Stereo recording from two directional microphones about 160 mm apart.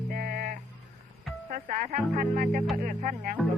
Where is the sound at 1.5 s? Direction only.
60° right (ahead or behind).